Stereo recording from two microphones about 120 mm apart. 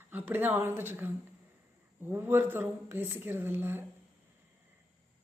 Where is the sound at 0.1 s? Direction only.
15° right (ahead or behind).